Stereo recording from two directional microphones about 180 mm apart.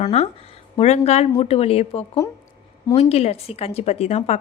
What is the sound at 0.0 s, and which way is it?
Speech, 35° left (ahead or behind).